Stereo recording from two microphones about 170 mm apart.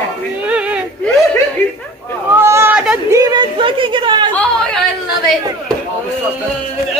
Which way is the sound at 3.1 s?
20° right (ahead or behind).